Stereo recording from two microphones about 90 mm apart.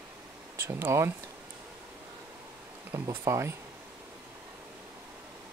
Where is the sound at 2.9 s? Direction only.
30° right (ahead or behind).